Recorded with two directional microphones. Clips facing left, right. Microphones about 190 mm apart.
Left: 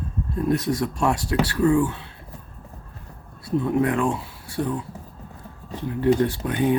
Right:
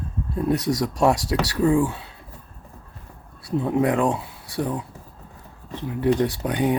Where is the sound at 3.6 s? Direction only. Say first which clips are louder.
Right 2 dB; 20° right (ahead or behind).